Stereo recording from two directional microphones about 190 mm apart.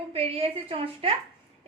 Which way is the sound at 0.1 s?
30° right (ahead or behind).